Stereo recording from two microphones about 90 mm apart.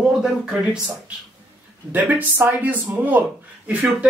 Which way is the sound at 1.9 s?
20° right (ahead or behind).